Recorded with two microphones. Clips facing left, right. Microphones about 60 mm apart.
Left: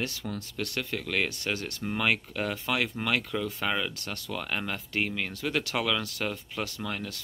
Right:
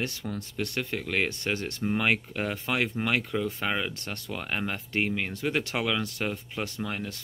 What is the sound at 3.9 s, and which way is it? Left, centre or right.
Speech, right.